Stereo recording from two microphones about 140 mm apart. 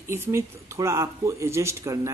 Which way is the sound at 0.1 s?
20° right (ahead or behind).